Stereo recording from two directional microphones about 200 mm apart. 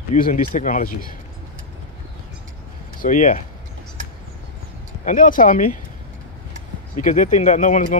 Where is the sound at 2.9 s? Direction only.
40° left (ahead or behind).